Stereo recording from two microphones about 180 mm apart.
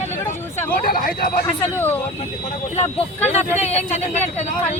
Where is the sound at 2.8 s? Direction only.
35° left (ahead or behind).